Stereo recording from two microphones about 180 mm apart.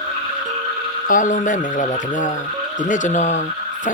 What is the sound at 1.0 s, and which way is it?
Speech, 45° left (ahead or behind).